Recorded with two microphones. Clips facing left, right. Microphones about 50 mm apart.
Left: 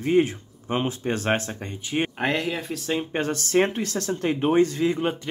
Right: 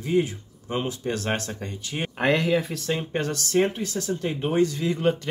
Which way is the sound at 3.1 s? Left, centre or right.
Left.